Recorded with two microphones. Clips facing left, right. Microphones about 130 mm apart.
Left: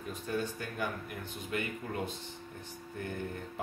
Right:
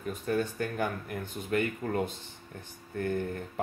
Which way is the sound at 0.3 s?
50° right (ahead or behind).